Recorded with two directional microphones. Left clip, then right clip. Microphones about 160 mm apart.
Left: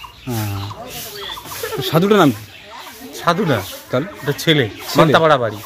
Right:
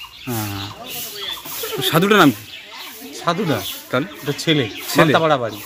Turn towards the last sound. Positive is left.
turn(degrees=5)  # may be behind; listen again after turning